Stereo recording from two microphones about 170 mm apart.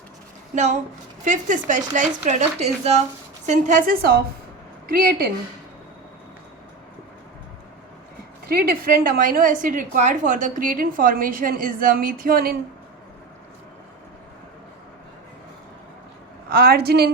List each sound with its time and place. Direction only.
0.5 s a woman's voice: 45° right (ahead or behind)
8.4 s a woman's voice: 60° right (ahead or behind)
16.5 s a woman's voice: 65° right (ahead or behind)